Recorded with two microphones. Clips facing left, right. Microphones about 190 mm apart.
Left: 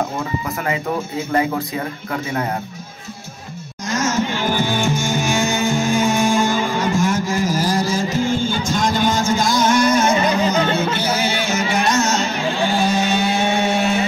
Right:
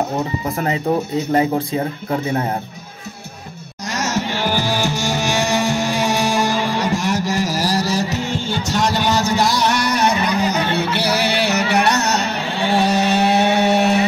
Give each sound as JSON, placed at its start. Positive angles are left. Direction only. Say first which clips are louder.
{"t": 1.3, "sound": "speech", "louder": "right 2 dB", "side_deg": -30}
{"t": 4.0, "sound": "music", "louder": "left 1 dB", "side_deg": -35}
{"t": 6.0, "sound": "music", "louder": "left 2 dB", "side_deg": -75}
{"t": 6.3, "sound": "music", "louder": "left 1 dB", "side_deg": -35}
{"t": 7.4, "sound": "music", "louder": "left 1 dB", "side_deg": -75}